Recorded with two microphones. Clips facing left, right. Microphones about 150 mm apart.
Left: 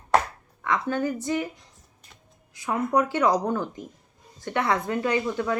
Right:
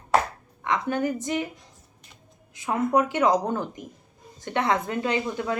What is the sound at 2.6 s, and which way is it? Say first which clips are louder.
A woman's voice: right 1 dB; 20° right (ahead or behind).